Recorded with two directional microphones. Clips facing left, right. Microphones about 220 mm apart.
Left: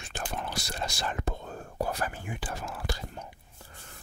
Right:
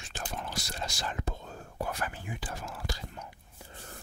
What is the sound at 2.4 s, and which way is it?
Whispering, 75° left (ahead or behind).